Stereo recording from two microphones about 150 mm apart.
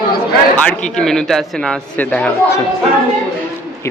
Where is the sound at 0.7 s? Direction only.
5° left (ahead or behind).